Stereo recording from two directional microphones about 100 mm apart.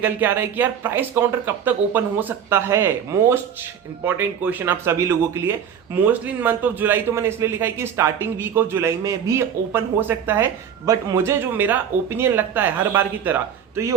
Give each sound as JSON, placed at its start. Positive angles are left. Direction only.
{"t": 0.0, "sound": "speech", "side_deg": -20}